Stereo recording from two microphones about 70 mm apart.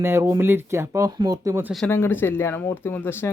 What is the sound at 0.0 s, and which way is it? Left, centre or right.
Speech, right.